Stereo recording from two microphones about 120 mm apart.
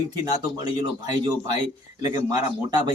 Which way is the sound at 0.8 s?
35° right (ahead or behind).